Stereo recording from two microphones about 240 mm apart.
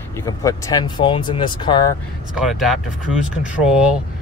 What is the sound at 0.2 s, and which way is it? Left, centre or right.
Speech, centre.